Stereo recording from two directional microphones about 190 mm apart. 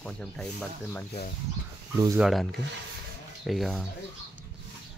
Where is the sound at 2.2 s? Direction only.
Centre (ahead or behind).